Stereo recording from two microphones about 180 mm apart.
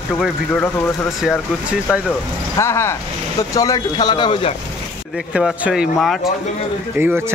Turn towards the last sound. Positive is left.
turn(degrees=-10)  # may be behind; listen again after turning